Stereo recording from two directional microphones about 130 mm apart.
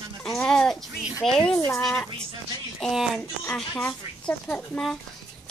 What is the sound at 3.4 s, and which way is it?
Child singing, 10° left (ahead or behind).